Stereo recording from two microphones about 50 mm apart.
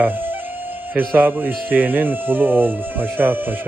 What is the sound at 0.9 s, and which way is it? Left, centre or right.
Speech, right.